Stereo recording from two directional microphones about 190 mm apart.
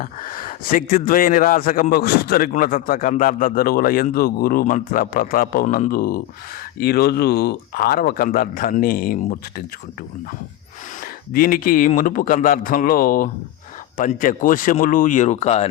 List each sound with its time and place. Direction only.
0.0 s speech: 45° left (ahead or behind)
11.3 s speech: 50° left (ahead or behind); by 15.7 s 35° left (ahead or behind)